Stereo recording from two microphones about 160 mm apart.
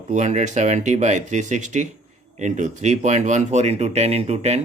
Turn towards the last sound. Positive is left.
turn(degrees=-40)  # may be behind; listen again after turning